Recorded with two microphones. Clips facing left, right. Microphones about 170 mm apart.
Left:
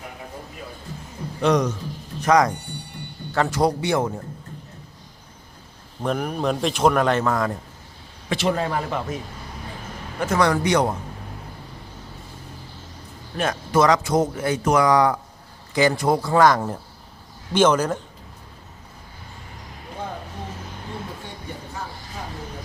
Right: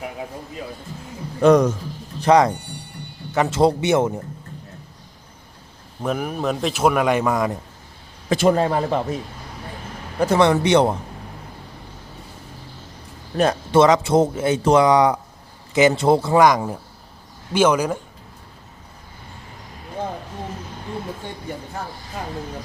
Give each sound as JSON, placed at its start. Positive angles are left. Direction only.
{"t": 1.4, "sound": "a man's voice", "side_deg": -50}
{"t": 2.2, "sound": "a man's voice", "side_deg": -30}
{"t": 6.0, "sound": "speech", "side_deg": -5}
{"t": 8.3, "sound": "a man's voice", "side_deg": -45}
{"t": 8.6, "sound": "speech", "side_deg": -30}
{"t": 10.2, "sound": "a man's voice", "side_deg": -30}
{"t": 13.3, "sound": "a man's voice", "side_deg": -30}